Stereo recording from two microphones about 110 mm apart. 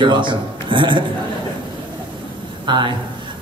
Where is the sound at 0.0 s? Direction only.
45° right (ahead or behind).